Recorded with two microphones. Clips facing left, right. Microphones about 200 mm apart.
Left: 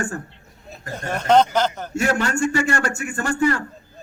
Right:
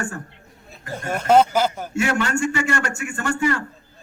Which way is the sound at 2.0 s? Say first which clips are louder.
Left 1 dB; 40° left (ahead or behind).